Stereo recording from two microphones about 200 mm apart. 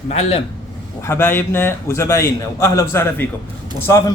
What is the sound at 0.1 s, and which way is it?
Speech, 30° left (ahead or behind).